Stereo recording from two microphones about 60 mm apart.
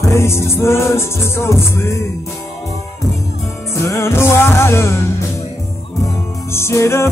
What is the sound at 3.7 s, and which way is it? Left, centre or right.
Music, left.